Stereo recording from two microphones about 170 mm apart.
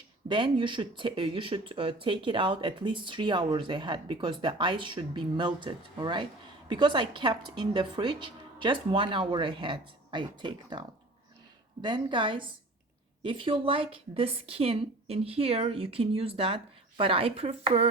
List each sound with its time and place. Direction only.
0.3 s a woman's voice: 30° right (ahead or behind)